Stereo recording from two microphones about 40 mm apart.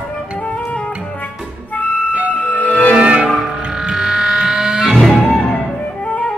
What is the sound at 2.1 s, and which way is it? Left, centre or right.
Music, right.